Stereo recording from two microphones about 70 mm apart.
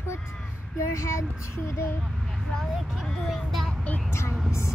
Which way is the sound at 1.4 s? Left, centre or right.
Left.